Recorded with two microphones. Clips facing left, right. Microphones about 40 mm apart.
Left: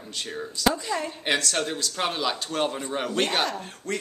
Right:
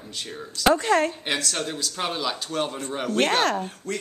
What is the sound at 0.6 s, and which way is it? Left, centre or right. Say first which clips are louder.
Speech: right 6 dB; right.